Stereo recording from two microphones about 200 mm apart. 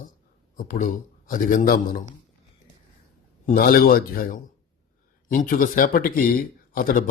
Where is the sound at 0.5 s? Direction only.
45° left (ahead or behind).